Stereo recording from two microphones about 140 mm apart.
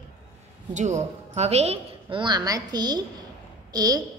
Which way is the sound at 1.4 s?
50° right (ahead or behind).